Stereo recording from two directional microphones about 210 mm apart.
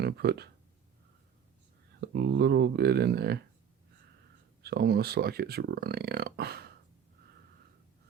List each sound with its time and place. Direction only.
0.0 s speech: 50° right (ahead or behind)
2.0 s speech: 50° right (ahead or behind)
4.6 s speech: 50° right (ahead or behind)